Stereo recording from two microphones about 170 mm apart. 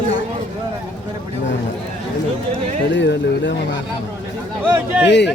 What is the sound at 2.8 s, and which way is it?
Speech, 90° left.